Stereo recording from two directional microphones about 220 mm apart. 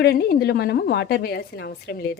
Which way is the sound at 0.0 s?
45° left (ahead or behind).